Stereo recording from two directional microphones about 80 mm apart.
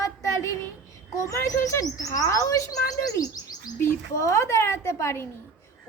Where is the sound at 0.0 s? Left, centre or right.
Left.